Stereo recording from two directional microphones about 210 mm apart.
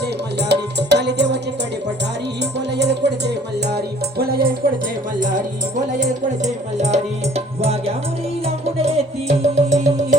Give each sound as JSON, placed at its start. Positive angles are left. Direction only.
{"t": 0.0, "sound": "music", "side_deg": -55}
{"t": 2.4, "sound": "music", "side_deg": -55}
{"t": 6.4, "sound": "music", "side_deg": -35}